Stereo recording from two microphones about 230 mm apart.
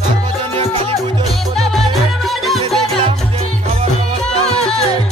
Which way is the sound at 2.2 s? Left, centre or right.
Centre.